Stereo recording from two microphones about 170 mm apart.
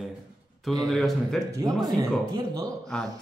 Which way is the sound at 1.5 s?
20° right (ahead or behind).